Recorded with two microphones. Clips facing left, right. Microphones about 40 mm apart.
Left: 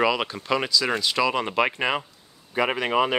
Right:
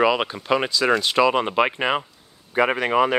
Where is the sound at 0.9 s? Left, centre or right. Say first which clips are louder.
Right 5 dB; right.